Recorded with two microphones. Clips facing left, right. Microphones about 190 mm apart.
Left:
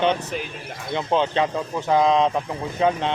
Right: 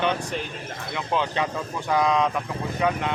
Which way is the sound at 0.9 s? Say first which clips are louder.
Left 5 dB; 25° left (ahead or behind).